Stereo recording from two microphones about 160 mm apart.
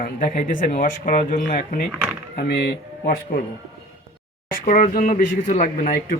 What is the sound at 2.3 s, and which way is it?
Speech, 80° left.